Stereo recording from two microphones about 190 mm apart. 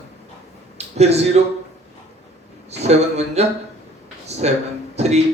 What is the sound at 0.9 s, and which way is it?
Speech, 35° right (ahead or behind).